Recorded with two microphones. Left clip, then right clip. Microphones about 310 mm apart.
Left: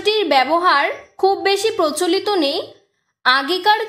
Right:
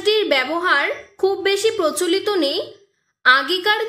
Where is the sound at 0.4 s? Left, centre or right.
Centre.